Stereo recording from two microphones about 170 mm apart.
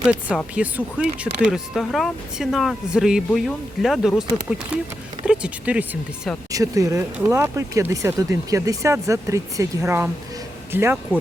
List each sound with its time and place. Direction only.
0.1 s speech: 5° right (ahead or behind)
6.5 s speech: 20° right (ahead or behind)